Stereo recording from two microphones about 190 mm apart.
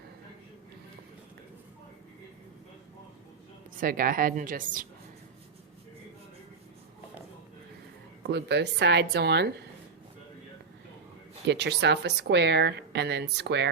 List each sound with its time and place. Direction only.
3.8 s a woman's voice: 50° right (ahead or behind)
8.3 s speech: 60° right (ahead or behind)
11.4 s speech: 65° right (ahead or behind)